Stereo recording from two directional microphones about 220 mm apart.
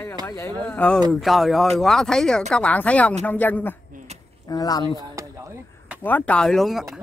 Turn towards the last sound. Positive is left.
turn(degrees=0)  # may be behind; listen again after turning